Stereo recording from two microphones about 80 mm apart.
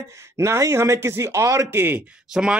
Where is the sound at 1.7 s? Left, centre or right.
Right.